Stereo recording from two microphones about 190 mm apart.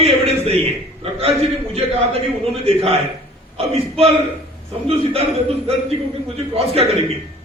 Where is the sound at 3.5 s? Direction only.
30° right (ahead or behind).